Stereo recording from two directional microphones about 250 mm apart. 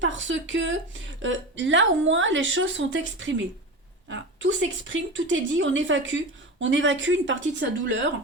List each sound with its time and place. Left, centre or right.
0.0 s a woman's voice: right